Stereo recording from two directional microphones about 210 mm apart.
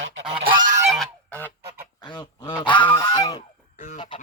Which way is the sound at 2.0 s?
20° left (ahead or behind).